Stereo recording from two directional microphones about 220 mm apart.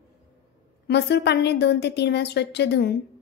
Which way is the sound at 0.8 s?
50° left (ahead or behind).